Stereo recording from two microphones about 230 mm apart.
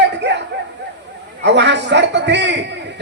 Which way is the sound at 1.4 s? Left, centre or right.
Right.